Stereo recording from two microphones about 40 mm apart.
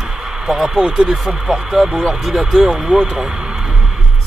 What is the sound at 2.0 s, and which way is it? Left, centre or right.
Speech, centre.